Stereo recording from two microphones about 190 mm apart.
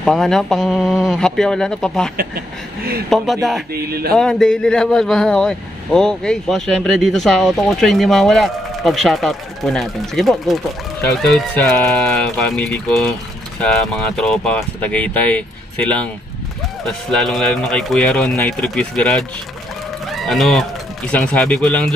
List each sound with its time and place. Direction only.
0.0 s speech: centre (ahead or behind)
3.7 s speech: 55° right (ahead or behind)
4.2 s speech: 5° left (ahead or behind)
16.8 s speech: centre (ahead or behind)